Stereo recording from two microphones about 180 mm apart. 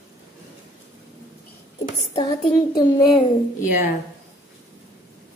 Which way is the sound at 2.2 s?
25° left (ahead or behind).